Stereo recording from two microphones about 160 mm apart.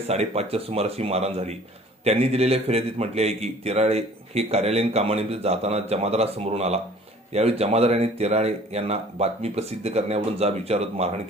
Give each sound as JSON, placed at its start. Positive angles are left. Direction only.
{"t": 0.1, "sound": "a man's voice", "side_deg": -40}